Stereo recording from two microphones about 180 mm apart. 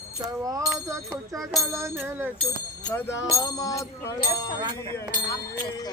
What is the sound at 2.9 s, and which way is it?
Speech, 10° left (ahead or behind).